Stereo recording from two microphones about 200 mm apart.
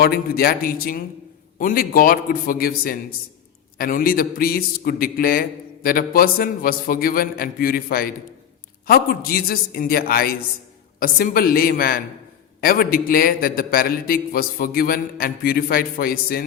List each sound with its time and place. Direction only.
0.0 s a man's voice: 50° left (ahead or behind)